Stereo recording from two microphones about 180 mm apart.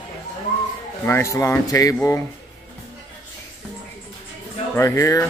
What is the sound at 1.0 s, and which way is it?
Speech, 15° left (ahead or behind).